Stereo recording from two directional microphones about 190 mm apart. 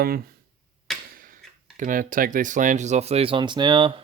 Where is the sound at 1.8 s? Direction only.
45° right (ahead or behind).